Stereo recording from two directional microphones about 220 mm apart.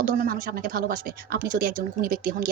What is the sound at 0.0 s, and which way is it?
Speech, 40° right (ahead or behind).